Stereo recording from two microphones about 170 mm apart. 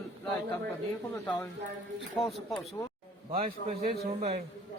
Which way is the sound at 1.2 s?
15° left (ahead or behind).